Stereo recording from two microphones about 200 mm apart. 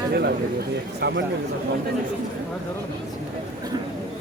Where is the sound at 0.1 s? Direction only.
55° right (ahead or behind).